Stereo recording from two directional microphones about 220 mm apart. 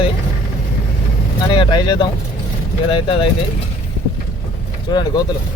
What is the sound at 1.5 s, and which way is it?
Speech, 20° left (ahead or behind).